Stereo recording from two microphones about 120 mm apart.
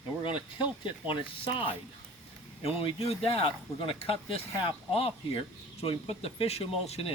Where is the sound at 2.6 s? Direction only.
55° left (ahead or behind).